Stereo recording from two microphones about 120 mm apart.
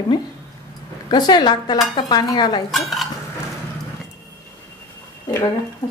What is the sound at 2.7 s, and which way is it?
Dishes, centre (ahead or behind).